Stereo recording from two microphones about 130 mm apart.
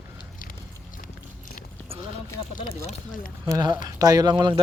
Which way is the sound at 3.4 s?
30° right (ahead or behind).